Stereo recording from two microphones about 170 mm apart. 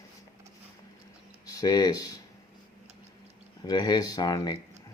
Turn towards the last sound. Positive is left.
turn(degrees=20)  # may be behind; listen again after turning